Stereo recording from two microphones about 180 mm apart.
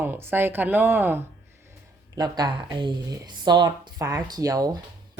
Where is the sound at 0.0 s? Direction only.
10° right (ahead or behind).